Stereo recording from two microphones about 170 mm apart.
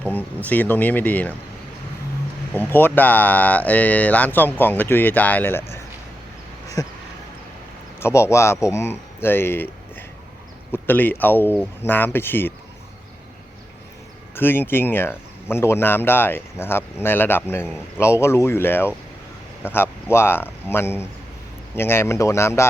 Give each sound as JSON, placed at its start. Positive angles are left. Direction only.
{"t": 0.0, "sound": "speech", "side_deg": 10}
{"t": 2.6, "sound": "speech", "side_deg": 10}
{"t": 6.8, "sound": "a sound", "side_deg": 20}
{"t": 7.9, "sound": "speech", "side_deg": 15}
{"t": 10.7, "sound": "speech", "side_deg": 10}
{"t": 14.3, "sound": "speech", "side_deg": 10}